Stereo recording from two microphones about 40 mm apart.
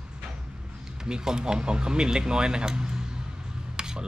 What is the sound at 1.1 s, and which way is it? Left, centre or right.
Speech, centre.